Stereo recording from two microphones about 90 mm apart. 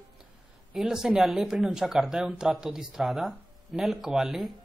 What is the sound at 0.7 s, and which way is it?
Speech, 5° right (ahead or behind).